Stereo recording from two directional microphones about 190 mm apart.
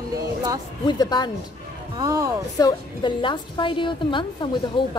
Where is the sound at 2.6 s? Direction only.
25° left (ahead or behind).